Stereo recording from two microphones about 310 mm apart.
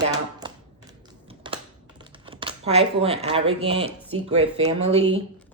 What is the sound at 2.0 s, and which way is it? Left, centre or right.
Speech, centre.